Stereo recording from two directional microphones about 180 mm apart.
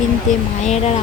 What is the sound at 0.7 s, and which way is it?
Speech, 35° left (ahead or behind).